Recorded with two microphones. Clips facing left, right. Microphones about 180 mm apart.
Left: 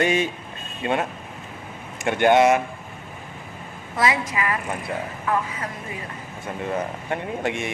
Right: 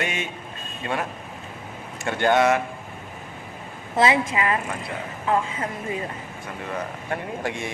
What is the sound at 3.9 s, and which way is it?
Speech, 25° right (ahead or behind).